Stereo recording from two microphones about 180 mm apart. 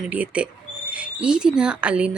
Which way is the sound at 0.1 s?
10° right (ahead or behind).